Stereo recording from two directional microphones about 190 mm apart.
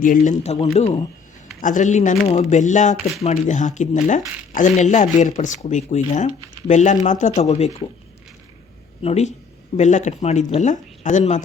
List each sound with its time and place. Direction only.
0.0 s speech: 45° left (ahead or behind)
9.0 s speech: 35° left (ahead or behind)